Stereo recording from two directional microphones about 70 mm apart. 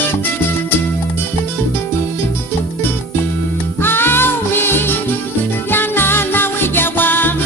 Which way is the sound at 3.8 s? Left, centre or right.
Left.